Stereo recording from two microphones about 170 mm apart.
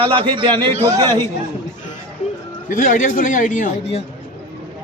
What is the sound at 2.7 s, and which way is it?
Speech, 50° left (ahead or behind).